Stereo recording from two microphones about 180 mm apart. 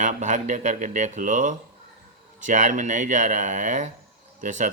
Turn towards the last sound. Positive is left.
turn(degrees=-45)  # may be behind; listen again after turning